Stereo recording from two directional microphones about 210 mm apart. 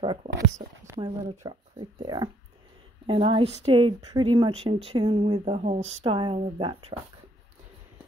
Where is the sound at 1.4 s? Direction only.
20° right (ahead or behind).